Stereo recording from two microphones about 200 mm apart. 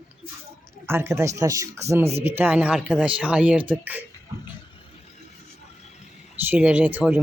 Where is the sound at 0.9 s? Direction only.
10° right (ahead or behind).